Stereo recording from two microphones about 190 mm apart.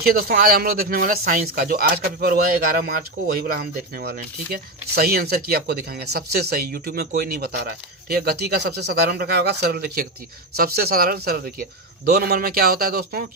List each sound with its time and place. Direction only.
0.0 s speech: 50° right (ahead or behind)